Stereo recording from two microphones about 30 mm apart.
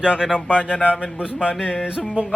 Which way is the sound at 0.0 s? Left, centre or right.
Right.